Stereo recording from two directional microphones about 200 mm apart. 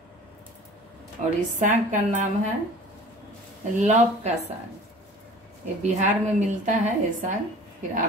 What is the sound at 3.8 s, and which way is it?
Speech, 35° right (ahead or behind).